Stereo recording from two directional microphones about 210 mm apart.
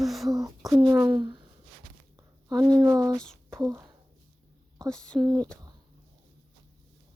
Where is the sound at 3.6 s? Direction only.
15° right (ahead or behind).